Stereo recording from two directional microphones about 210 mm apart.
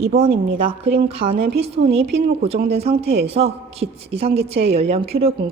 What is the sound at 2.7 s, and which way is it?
A woman's voice, 30° right (ahead or behind).